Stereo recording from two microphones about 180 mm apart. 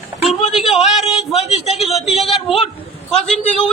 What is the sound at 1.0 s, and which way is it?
Speech, 35° left (ahead or behind).